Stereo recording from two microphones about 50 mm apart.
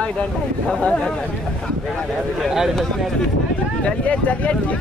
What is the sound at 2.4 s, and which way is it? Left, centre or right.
Speech, centre.